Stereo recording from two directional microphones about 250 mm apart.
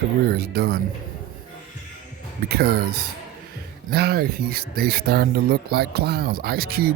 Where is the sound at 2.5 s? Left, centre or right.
Right.